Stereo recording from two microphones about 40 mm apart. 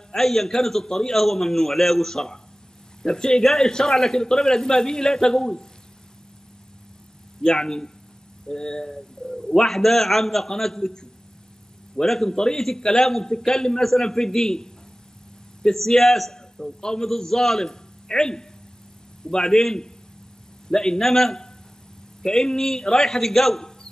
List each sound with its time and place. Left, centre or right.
0.1 s a man's voice: centre
7.4 s a man's voice: centre